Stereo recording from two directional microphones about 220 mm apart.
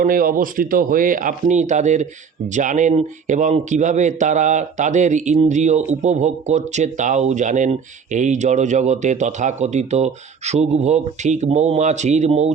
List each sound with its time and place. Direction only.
0.0 s speech: 40° right (ahead or behind)